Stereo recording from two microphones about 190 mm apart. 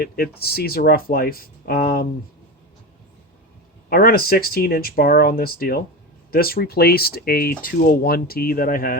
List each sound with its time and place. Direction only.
0.0 s speech: 55° left (ahead or behind)
3.8 s speech: 50° left (ahead or behind)